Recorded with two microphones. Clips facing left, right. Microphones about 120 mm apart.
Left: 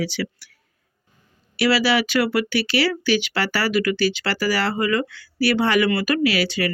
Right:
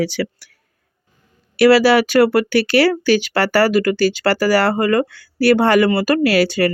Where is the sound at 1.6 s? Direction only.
45° right (ahead or behind).